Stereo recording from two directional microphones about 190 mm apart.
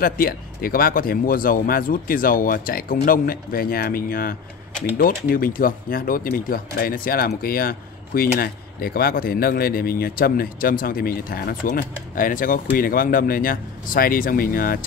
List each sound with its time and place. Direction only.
0.0 s speech: 50° left (ahead or behind)